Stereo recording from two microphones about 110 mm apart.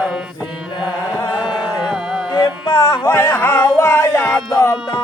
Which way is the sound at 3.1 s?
25° left (ahead or behind).